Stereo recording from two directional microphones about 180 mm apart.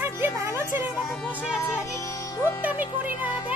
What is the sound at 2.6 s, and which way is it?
Music, 10° right (ahead or behind).